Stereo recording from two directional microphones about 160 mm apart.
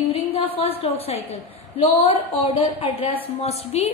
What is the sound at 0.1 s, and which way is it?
A woman's voice, 35° left (ahead or behind).